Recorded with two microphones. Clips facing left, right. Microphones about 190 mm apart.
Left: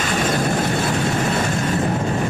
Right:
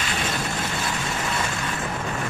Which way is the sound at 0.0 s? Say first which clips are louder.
Left 8 dB; 50° left (ahead or behind).